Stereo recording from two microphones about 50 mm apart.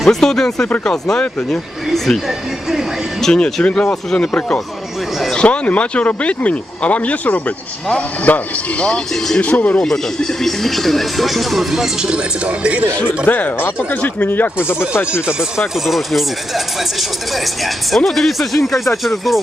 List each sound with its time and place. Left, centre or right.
0.0 s speech: centre
2.2 s music: centre
3.2 s speech: centre
9.1 s speech: centre
9.4 s speech: left
9.7 s speech: centre
11.9 s a man's voice: centre
12.5 s speech: right
13.2 s speech: left
14.7 s speech: left
15.7 s speech: centre